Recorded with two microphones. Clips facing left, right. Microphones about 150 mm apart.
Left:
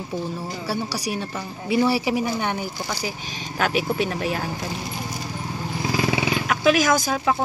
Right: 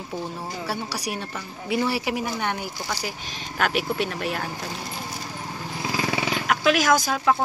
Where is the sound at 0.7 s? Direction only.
35° left (ahead or behind).